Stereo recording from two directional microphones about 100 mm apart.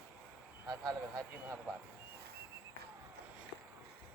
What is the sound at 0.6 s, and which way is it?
Speech, 35° right (ahead or behind).